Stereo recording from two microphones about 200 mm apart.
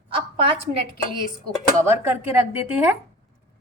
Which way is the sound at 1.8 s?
10° right (ahead or behind).